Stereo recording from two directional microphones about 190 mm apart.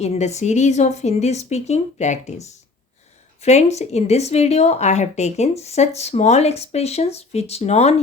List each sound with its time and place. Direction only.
0.0 s speech: 35° left (ahead or behind)